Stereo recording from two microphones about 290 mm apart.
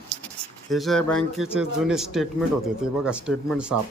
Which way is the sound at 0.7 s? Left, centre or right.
Centre.